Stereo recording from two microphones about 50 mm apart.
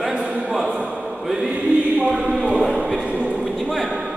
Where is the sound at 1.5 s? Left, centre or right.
Right.